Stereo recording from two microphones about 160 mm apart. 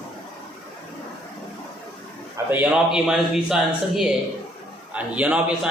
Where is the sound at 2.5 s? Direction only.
10° right (ahead or behind).